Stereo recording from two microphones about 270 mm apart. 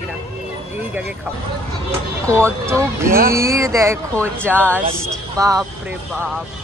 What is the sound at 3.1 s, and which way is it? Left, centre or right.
Speech, right.